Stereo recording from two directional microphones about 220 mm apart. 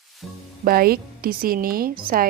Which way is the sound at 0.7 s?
45° right (ahead or behind).